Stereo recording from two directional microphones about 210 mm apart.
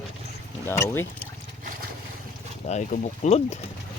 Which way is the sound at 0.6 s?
10° left (ahead or behind).